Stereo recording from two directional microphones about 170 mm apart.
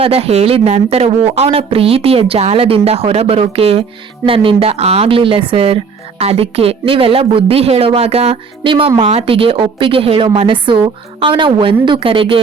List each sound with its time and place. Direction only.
0.0 s speech: 35° right (ahead or behind)